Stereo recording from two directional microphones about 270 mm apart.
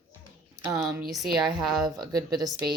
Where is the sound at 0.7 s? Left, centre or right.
Centre.